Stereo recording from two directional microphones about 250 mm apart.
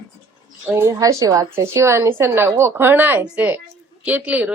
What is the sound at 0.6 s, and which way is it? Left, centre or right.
A woman's voice, centre.